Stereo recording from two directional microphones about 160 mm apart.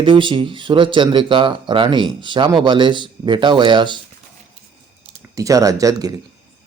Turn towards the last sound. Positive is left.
turn(degrees=-20)  # may be behind; listen again after turning